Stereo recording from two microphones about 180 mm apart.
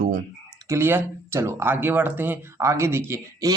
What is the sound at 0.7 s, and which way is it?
Speech, 10° right (ahead or behind).